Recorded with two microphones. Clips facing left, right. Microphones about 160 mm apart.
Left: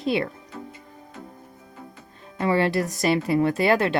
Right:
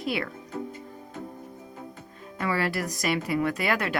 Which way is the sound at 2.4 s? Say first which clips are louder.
Left 6 dB; 25° left (ahead or behind).